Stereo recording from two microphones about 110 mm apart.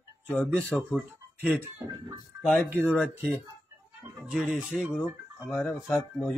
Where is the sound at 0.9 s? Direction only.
5° right (ahead or behind).